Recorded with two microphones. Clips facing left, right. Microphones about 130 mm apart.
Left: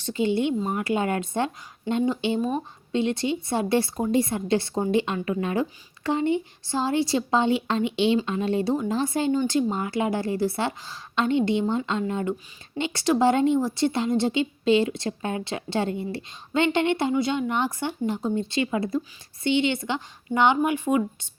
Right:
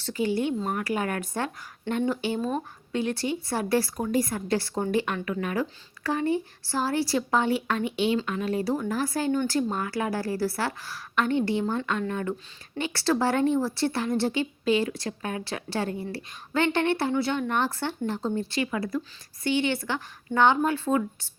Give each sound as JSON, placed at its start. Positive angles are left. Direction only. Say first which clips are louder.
{"t": 0.0, "sound": "a woman's voice", "louder": "left 3 dB", "side_deg": 25}